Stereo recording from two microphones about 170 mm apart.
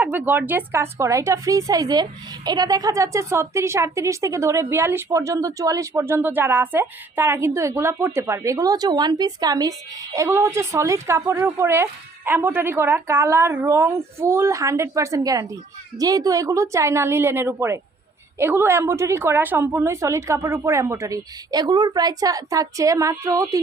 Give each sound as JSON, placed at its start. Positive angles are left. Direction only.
{"t": 0.0, "sound": "a woman's voice", "side_deg": -10}